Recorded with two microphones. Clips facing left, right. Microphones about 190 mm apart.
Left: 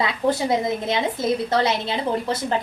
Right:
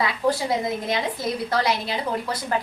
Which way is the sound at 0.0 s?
25° left (ahead or behind).